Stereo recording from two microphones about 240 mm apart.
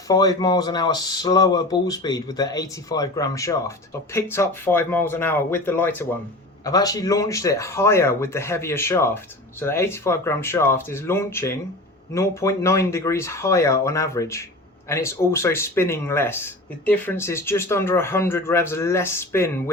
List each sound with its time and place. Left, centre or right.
0.1 s speech: centre